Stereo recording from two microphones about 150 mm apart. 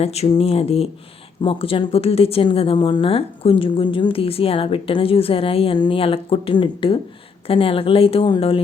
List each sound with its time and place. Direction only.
0.0 s speech: 45° left (ahead or behind)